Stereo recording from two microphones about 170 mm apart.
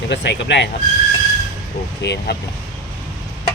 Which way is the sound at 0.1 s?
90° left.